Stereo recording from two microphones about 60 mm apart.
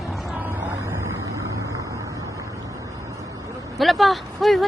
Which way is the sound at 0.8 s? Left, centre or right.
Right.